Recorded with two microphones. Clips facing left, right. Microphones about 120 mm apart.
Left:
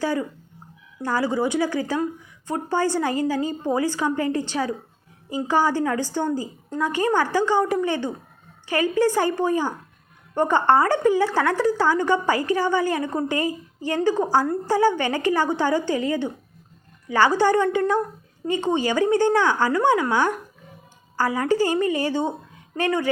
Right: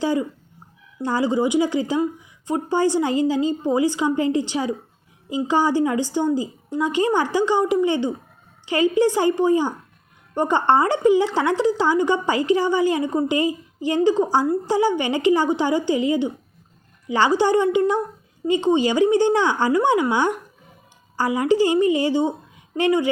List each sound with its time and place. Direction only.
0.0 s a woman's voice: 20° right (ahead or behind)